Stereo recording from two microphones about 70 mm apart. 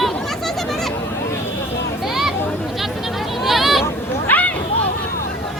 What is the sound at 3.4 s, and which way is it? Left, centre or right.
Vehicle, centre.